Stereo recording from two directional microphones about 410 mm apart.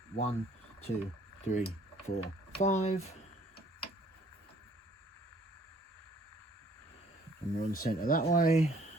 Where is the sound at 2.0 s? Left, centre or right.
Centre.